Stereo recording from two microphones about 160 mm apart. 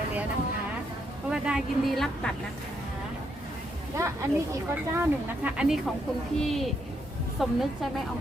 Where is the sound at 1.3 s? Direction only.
5° right (ahead or behind).